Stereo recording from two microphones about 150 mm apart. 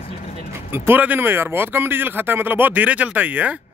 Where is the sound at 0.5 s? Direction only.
15° right (ahead or behind).